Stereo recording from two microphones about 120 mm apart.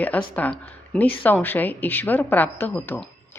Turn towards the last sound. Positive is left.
turn(degrees=15)  # may be behind; listen again after turning